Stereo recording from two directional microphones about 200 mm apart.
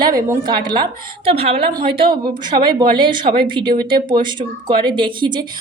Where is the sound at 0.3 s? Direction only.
20° right (ahead or behind).